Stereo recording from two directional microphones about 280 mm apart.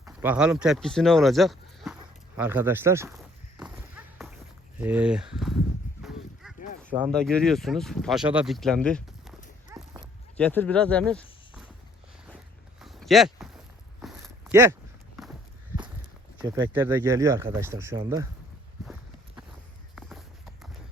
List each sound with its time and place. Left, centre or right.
0.0 s speech: centre
3.7 s clip-clop: centre
4.8 s speech: centre
6.0 s honk: centre
6.6 s a sound: left
6.9 s speech: centre
9.7 s dog: centre
10.3 s speech: centre
12.8 s a sound: centre
14.0 s walk: centre
16.4 s speech: centre
20.0 s clip-clop: centre